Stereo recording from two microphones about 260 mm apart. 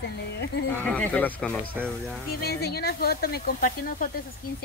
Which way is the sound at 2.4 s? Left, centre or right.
Left.